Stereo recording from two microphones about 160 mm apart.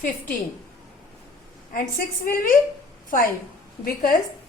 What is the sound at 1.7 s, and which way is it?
Speech, 60° left (ahead or behind).